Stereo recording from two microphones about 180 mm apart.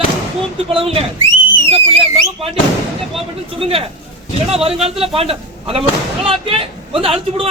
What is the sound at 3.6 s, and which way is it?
A man's voice, 30° right (ahead or behind).